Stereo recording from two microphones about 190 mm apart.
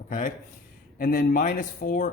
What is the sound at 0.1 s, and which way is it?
A man's voice, 45° left (ahead or behind).